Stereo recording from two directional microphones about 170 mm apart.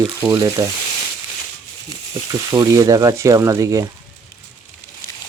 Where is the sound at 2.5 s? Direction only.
20° right (ahead or behind).